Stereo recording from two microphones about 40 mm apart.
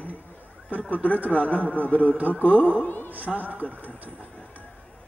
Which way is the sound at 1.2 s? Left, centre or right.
Right.